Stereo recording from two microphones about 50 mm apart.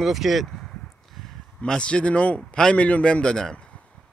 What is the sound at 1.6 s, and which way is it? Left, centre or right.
Speech, centre.